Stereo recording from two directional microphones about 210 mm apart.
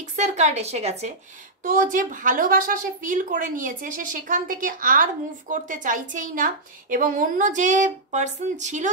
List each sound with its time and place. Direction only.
0.1 s a woman's voice: 35° right (ahead or behind)